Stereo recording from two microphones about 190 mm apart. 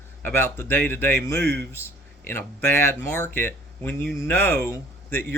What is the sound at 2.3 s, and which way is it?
Speech, 10° left (ahead or behind).